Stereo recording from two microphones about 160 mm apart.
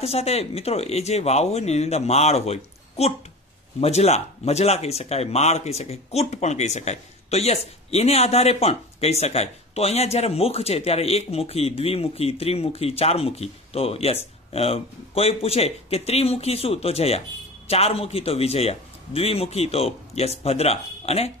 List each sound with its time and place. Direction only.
0.0 s speech: 40° left (ahead or behind)